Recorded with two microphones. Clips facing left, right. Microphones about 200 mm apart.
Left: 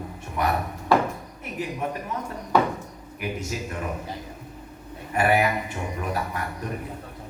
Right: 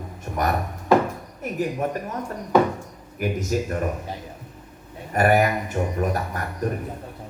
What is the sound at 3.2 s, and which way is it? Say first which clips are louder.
Speech: right 6 dB; 45° right (ahead or behind).